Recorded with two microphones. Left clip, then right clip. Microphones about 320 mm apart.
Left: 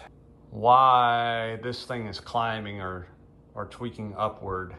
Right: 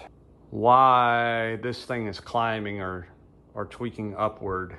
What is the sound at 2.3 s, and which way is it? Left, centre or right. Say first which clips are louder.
Speech: right 2 dB; right.